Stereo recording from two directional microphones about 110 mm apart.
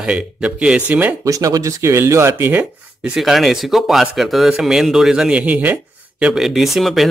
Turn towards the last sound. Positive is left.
turn(degrees=0)  # may be behind; listen again after turning